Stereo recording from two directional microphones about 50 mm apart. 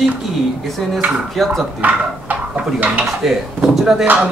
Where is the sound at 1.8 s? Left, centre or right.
Right.